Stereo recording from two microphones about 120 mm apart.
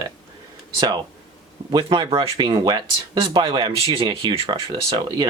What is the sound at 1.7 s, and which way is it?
Speech, 45° right (ahead or behind).